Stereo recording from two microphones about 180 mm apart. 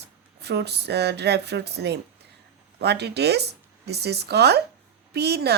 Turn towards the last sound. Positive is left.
turn(degrees=-65)  # may be behind; listen again after turning